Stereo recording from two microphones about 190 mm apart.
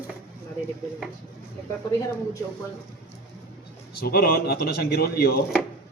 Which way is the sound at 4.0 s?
55° left (ahead or behind).